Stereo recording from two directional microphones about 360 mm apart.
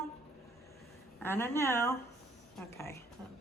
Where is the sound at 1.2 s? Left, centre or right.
Centre.